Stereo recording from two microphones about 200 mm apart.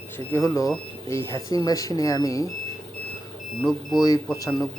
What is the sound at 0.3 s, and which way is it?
Speech, 15° left (ahead or behind).